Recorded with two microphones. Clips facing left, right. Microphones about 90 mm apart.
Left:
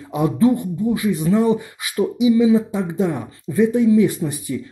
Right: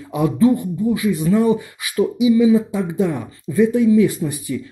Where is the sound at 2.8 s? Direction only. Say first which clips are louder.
Right 1 dB; 20° left (ahead or behind).